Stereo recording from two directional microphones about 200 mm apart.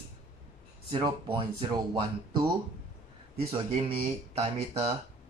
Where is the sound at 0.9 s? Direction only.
25° right (ahead or behind).